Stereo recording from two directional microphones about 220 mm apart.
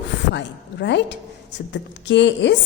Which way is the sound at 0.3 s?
55° left (ahead or behind).